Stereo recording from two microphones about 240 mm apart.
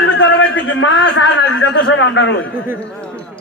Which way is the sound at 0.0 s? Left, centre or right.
Left.